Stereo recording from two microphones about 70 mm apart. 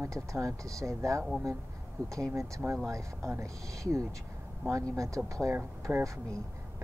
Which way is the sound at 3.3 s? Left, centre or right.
Right.